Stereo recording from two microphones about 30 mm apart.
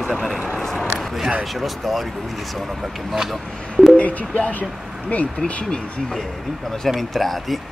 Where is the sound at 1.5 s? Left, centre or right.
Centre.